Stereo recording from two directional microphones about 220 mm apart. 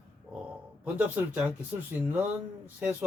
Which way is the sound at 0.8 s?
10° right (ahead or behind).